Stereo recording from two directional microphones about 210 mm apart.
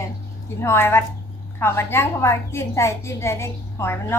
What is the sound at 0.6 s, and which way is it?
A woman's voice, 10° left (ahead or behind).